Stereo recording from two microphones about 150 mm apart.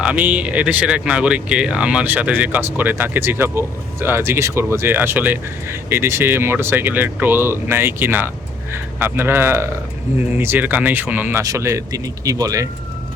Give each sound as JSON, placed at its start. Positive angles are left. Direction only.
{"t": 0.0, "sound": "speech", "side_deg": -10}